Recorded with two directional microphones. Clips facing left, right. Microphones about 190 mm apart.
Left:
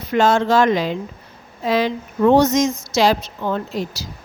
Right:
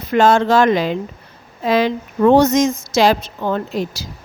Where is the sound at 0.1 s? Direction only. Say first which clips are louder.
Right 3 dB; 55° right (ahead or behind).